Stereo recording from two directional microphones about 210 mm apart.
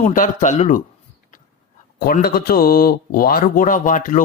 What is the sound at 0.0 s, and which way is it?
Speech, 40° left (ahead or behind).